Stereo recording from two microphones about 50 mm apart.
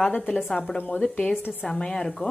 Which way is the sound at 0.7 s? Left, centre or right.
Left.